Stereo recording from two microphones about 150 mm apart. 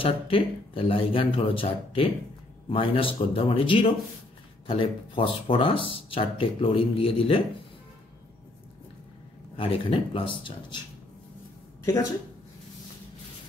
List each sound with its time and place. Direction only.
0.0 s speech: 35° left (ahead or behind)
9.6 s speech: 35° left (ahead or behind)
11.8 s speech: 20° left (ahead or behind)